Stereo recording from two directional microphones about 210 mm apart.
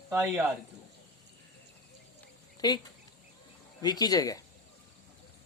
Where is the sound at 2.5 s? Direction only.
20° left (ahead or behind).